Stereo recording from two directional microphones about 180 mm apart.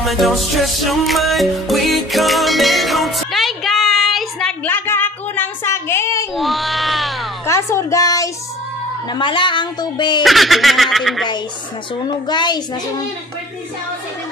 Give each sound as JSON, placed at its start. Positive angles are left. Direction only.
{"t": 0.0, "sound": "music", "side_deg": 0}
{"t": 6.3, "sound": "music", "side_deg": 0}
{"t": 7.4, "sound": "a woman's voice", "side_deg": 15}
{"t": 10.2, "sound": "speech", "side_deg": 0}
{"t": 12.3, "sound": "speech", "side_deg": 25}